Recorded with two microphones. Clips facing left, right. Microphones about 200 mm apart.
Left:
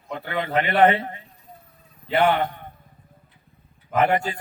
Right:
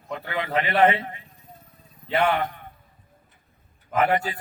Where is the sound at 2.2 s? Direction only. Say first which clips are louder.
Left 3 dB; 30° left (ahead or behind).